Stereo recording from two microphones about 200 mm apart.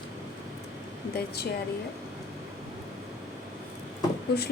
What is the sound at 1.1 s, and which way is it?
Speech, 55° left (ahead or behind).